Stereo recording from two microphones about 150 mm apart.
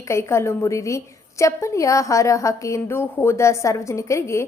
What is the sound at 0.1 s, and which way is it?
A woman's voice, 15° left (ahead or behind).